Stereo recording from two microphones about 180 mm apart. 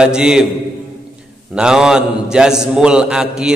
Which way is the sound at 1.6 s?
5° right (ahead or behind).